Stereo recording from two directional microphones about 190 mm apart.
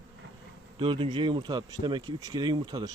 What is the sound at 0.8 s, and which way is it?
Speech, 25° right (ahead or behind).